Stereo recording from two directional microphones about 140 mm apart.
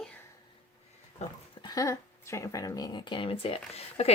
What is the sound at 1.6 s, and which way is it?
Speech, 25° left (ahead or behind).